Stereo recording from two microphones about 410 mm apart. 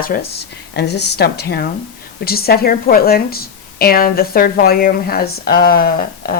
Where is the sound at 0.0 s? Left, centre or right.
Left.